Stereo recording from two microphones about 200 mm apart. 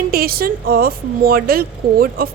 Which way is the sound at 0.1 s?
50° right (ahead or behind).